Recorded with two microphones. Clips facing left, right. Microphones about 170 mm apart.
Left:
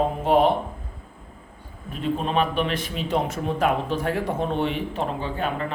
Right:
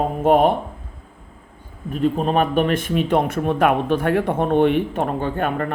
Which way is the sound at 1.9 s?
45° right (ahead or behind).